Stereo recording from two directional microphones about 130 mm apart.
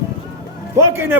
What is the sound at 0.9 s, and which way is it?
Speech, 20° right (ahead or behind).